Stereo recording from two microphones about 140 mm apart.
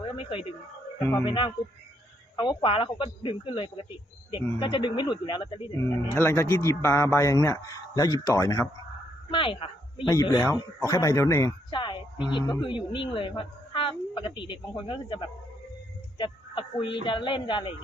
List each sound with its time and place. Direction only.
0.1 s speech: 40° left (ahead or behind)
5.8 s speech: 20° left (ahead or behind)
9.3 s speech: 40° left (ahead or behind)
10.1 s speech: 30° left (ahead or behind)
11.7 s speech: 35° left (ahead or behind)